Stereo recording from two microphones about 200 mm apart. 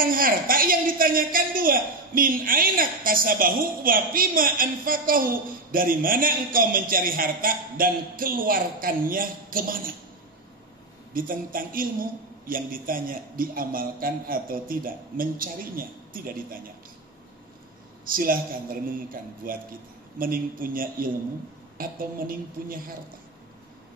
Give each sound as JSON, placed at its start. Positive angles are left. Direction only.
{"t": 0.0, "sound": "a woman's voice", "side_deg": -45}
{"t": 11.1, "sound": "a woman's voice", "side_deg": -45}
{"t": 18.0, "sound": "a woman's voice", "side_deg": -45}